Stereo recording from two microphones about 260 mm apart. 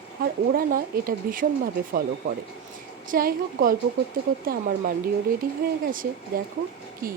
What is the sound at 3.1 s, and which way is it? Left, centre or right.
Speech, right.